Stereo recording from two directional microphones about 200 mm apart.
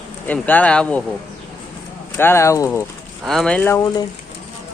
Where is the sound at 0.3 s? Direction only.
10° left (ahead or behind).